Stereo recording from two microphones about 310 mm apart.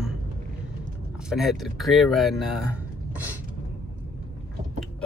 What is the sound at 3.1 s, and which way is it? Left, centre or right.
Beatboxing, centre.